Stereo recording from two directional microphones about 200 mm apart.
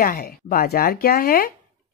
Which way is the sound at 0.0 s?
45° left (ahead or behind).